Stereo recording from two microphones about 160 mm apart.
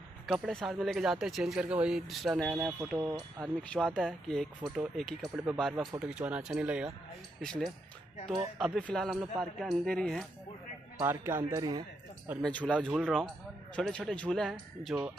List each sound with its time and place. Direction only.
0.3 s speech: centre (ahead or behind)
11.0 s speech: 15° right (ahead or behind)
12.4 s speech: 5° left (ahead or behind)